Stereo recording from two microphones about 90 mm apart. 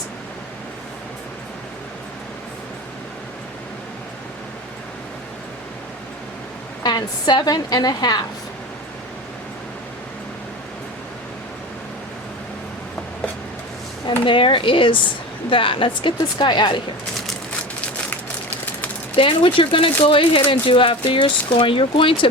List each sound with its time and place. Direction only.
6.8 s a woman's voice: 50° left (ahead or behind)
14.3 s speech: 70° left (ahead or behind)
16.4 s speech: 60° left (ahead or behind)
19.1 s speech: 70° left (ahead or behind)